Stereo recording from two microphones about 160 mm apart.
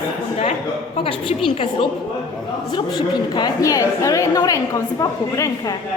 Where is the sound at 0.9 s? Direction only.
35° left (ahead or behind).